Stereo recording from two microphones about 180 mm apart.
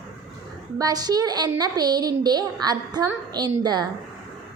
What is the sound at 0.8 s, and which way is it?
A woman's voice, 20° right (ahead or behind).